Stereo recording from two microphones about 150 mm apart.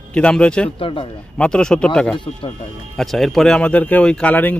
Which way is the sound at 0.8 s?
35° left (ahead or behind).